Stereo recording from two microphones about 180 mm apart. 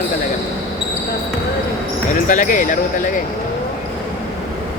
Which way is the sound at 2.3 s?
45° left (ahead or behind).